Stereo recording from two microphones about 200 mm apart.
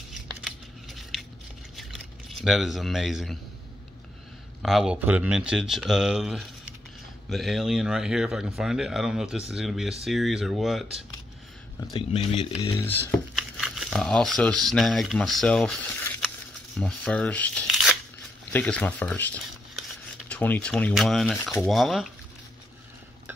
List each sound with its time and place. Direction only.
0.4 s scissors: centre (ahead or behind)
1.8 s a sound: centre (ahead or behind)
4.6 s speech: centre (ahead or behind)
11.9 s speech: 30° left (ahead or behind)
12.6 s speech: 10° left (ahead or behind)
13.6 s speech: centre (ahead or behind)